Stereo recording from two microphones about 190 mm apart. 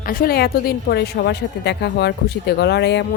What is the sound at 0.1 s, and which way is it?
A woman's voice, 50° left (ahead or behind).